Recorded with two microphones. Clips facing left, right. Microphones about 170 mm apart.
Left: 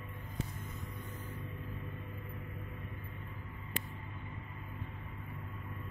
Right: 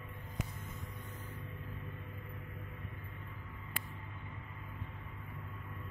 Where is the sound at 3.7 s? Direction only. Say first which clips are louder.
Left 5 dB; 20° left (ahead or behind).